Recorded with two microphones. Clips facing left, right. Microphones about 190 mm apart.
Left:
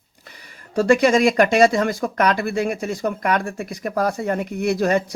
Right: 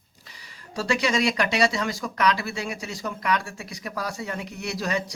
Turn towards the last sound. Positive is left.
turn(degrees=55)  # may be behind; listen again after turning